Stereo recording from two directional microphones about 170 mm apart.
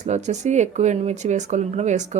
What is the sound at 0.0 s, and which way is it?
A woman's voice, 45° right (ahead or behind).